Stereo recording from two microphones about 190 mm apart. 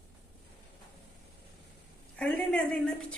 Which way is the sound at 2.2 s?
5° left (ahead or behind).